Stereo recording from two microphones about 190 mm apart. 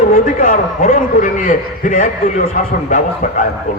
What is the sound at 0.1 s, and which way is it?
A man's voice, 45° left (ahead or behind).